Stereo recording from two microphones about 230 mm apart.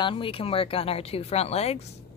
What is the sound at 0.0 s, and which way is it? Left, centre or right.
Speech, left.